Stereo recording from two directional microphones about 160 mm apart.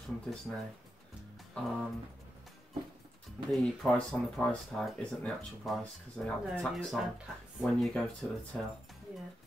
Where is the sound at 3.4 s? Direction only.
Centre (ahead or behind).